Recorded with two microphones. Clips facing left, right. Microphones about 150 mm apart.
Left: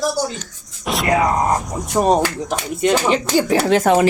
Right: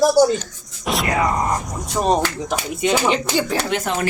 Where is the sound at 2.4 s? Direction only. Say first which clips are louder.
Left 2 dB; centre (ahead or behind).